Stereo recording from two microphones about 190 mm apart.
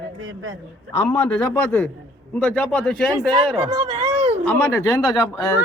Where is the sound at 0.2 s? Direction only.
90° right.